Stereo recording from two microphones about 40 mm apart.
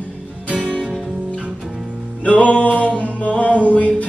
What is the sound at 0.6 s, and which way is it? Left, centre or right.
Music, left.